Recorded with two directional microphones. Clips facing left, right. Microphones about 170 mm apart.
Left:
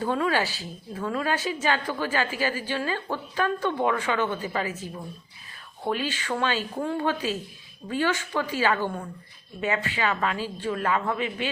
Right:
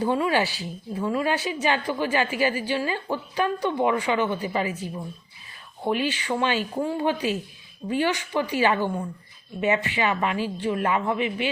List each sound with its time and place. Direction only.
0.0 s a woman's voice: 15° right (ahead or behind)